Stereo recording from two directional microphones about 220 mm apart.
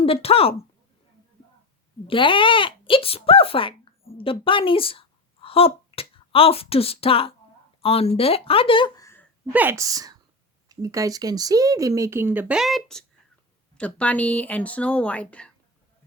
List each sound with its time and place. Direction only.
0.0 s speech: 25° left (ahead or behind)
2.0 s speech: 25° left (ahead or behind)
9.5 s speech: 10° right (ahead or behind)